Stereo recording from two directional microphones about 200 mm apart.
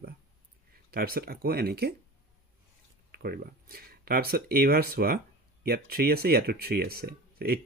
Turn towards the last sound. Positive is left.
turn(degrees=-50)  # may be behind; listen again after turning